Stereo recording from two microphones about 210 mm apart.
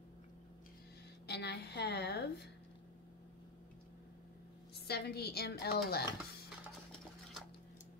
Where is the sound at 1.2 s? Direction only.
55° left (ahead or behind).